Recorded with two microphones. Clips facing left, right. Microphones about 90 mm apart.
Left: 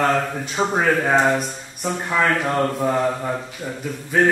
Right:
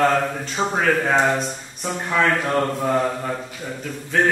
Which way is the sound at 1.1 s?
5° left (ahead or behind).